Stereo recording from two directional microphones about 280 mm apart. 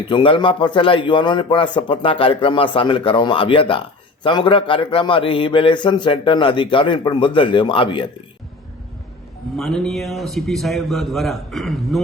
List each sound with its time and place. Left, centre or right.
0.1 s a man's voice: centre
9.6 s a man's voice: centre